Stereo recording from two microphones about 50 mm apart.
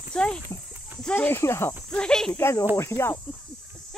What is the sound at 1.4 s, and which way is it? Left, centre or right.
Cricket, left.